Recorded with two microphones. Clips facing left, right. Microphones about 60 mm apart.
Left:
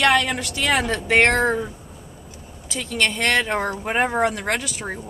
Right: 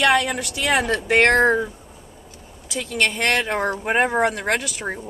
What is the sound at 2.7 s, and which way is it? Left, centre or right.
Speech, right.